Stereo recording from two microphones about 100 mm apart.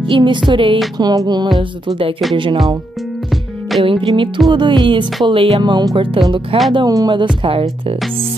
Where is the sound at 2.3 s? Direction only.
55° right (ahead or behind).